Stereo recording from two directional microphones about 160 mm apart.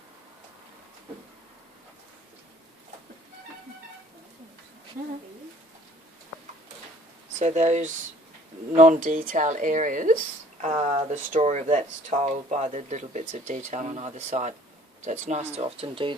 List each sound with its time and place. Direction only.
7.3 s speech: 45° right (ahead or behind)
10.6 s speech: 45° right (ahead or behind)